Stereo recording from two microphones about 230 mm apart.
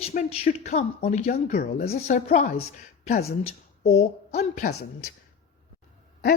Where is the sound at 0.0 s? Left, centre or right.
Left.